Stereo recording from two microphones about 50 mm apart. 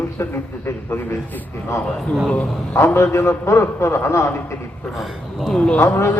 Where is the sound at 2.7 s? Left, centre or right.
Left.